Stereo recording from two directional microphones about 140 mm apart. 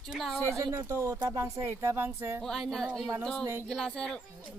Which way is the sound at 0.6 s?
25° right (ahead or behind).